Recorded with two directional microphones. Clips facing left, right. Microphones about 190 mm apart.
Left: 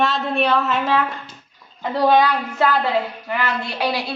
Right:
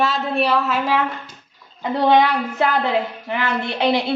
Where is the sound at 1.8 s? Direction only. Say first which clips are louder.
Even; 20° right (ahead or behind).